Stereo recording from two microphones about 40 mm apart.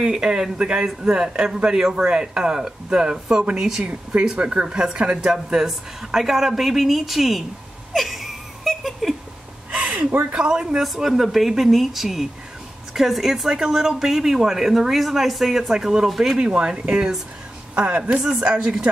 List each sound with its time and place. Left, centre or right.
0.0 s a man's voice: right
3.8 s a man's voice: right; by 7.4 s centre
7.9 s laughter: centre
9.7 s a sound: right
10.3 s a man's voice: centre
17.8 s speech: right
18.4 s a man's voice: right